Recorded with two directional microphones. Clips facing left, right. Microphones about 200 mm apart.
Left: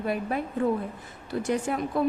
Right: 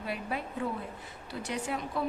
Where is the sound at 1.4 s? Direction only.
50° left (ahead or behind).